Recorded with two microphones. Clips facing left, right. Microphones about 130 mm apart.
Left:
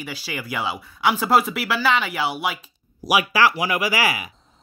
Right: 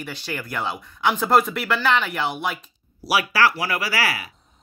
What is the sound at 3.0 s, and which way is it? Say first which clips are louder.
Speech: left 1 dB; 15° left (ahead or behind).